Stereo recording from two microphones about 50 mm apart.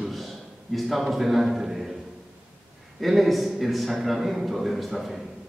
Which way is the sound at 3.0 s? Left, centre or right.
Centre.